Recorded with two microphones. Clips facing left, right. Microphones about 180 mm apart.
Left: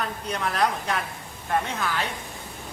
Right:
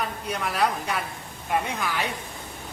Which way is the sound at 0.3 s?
10° right (ahead or behind).